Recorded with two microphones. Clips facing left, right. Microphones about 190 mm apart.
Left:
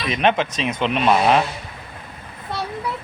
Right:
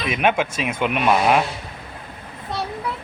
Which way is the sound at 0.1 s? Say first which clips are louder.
Left 1 dB; 10° right (ahead or behind).